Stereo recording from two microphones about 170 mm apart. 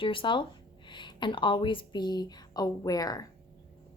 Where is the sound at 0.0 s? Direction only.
30° left (ahead or behind).